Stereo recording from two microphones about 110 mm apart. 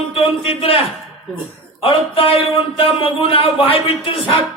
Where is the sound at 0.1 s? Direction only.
60° left (ahead or behind).